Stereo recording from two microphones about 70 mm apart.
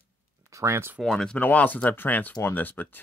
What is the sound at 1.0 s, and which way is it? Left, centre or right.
Speech, centre.